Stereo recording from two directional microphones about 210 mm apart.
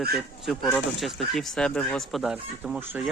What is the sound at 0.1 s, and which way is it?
Speech, centre (ahead or behind).